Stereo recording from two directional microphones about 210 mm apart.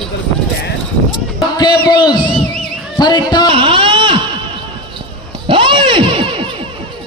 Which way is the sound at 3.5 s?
25° right (ahead or behind).